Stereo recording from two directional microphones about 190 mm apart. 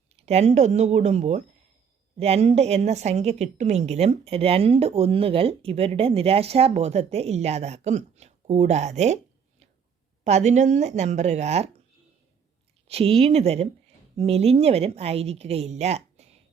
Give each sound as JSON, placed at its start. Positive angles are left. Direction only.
{"t": 0.2, "sound": "a woman's voice", "side_deg": -35}
{"t": 10.2, "sound": "a woman's voice", "side_deg": -35}
{"t": 12.9, "sound": "a woman's voice", "side_deg": -30}